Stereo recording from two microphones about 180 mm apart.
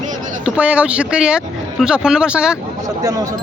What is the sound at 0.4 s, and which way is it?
Speech, 5° right (ahead or behind).